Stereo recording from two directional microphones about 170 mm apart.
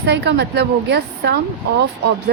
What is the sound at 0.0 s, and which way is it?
A woman's voice, 85° right.